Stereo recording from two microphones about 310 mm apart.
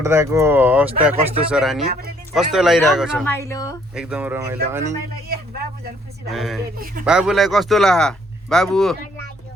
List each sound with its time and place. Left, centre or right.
0.0 s speech: centre
1.8 s speech: right
2.3 s speech: centre
3.5 s speech: centre
3.9 s speech: centre
6.3 s speech: centre
6.7 s speech: right
7.0 s speech: centre